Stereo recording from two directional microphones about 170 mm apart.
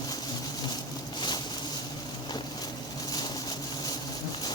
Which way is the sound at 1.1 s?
25° left (ahead or behind).